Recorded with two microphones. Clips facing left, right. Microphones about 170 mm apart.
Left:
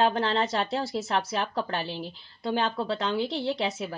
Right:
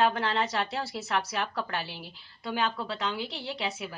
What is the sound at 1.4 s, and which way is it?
Speech, 20° left (ahead or behind).